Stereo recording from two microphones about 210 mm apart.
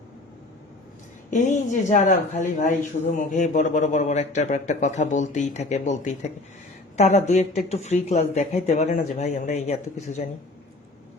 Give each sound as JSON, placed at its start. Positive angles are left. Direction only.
{"t": 1.3, "sound": "speech", "side_deg": 35}